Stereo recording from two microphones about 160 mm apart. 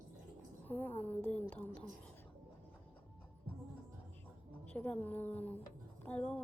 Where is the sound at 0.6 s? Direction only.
10° left (ahead or behind).